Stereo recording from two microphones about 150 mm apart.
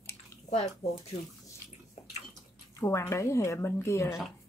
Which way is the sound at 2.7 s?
20° left (ahead or behind).